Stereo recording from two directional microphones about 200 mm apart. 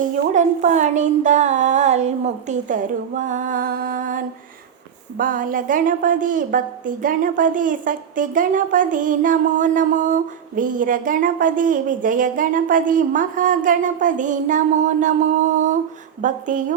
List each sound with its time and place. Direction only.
0.0 s a woman's voice: 35° right (ahead or behind)